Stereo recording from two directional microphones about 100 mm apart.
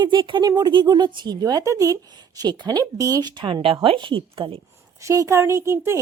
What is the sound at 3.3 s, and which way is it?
Speech, 55° right (ahead or behind).